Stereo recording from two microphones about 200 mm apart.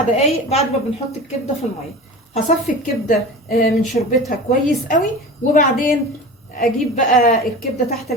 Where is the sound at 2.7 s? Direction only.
40° left (ahead or behind).